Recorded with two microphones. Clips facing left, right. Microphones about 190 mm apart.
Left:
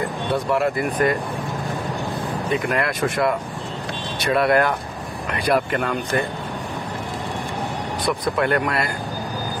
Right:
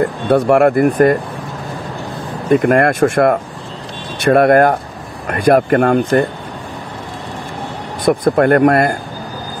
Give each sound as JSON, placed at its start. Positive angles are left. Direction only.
{"t": 0.0, "sound": "speech", "side_deg": -60}
{"t": 2.5, "sound": "speech", "side_deg": -50}
{"t": 8.0, "sound": "speech", "side_deg": -50}